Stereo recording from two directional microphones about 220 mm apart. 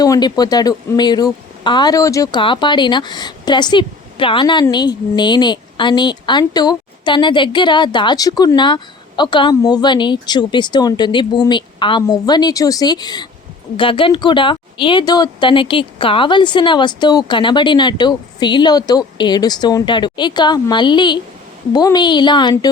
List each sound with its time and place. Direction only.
0.0 s speech: 20° left (ahead or behind)